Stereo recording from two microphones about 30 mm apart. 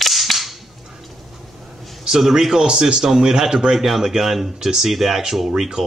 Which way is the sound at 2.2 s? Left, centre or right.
Centre.